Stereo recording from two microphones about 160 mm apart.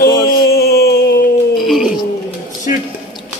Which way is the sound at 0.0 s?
75° left (ahead or behind).